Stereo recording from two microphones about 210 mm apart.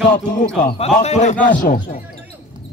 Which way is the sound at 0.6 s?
35° left (ahead or behind).